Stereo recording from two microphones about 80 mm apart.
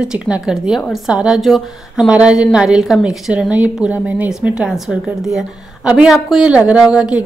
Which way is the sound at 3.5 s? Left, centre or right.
Centre.